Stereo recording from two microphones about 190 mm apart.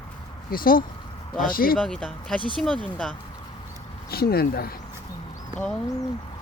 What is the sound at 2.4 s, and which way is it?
Speech, 25° right (ahead or behind).